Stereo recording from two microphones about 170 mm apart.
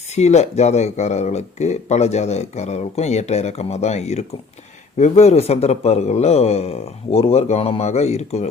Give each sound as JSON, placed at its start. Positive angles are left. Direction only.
{"t": 0.2, "sound": "speech", "side_deg": 40}